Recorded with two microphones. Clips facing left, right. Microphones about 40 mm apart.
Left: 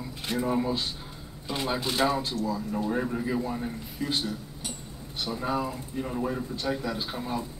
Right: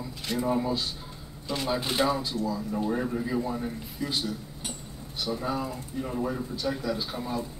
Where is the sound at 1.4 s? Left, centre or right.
Centre.